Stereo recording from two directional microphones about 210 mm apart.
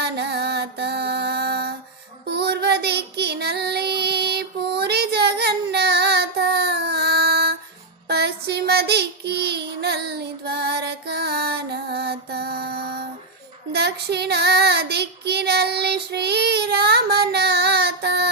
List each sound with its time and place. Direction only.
0.0 s music: 50° right (ahead or behind)
2.2 s child singing: 50° right (ahead or behind)